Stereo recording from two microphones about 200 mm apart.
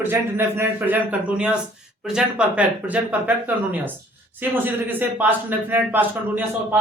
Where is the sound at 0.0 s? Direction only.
10° right (ahead or behind).